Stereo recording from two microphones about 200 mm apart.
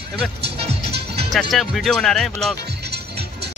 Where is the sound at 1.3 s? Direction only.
Centre (ahead or behind).